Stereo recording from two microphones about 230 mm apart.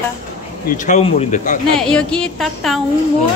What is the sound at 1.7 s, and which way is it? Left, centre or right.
Speech, centre.